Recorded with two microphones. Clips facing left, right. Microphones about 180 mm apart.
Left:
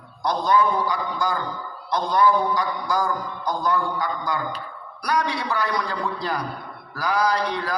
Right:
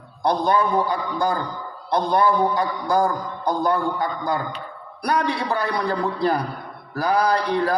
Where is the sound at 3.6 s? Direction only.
30° right (ahead or behind).